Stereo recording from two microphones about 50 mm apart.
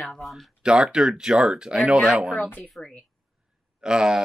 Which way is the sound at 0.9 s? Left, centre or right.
Centre.